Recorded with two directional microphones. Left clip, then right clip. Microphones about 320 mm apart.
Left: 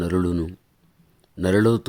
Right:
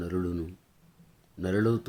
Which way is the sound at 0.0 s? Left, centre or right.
Left.